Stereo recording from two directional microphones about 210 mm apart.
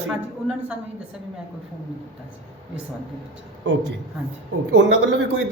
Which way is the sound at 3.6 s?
55° right (ahead or behind).